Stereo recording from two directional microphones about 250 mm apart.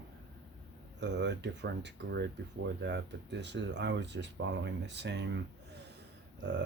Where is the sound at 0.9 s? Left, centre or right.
Right.